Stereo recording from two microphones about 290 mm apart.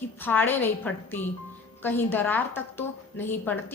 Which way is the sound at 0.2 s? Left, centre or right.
Centre.